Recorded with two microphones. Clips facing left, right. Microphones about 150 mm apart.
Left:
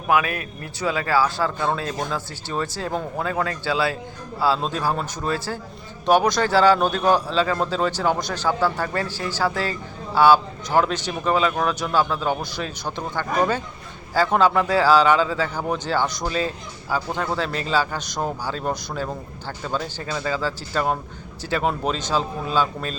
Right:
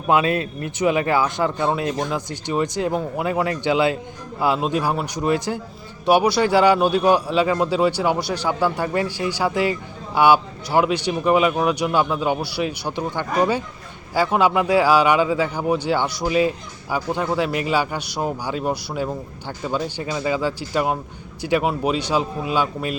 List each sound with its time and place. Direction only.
0.1 s a man's voice: 25° right (ahead or behind)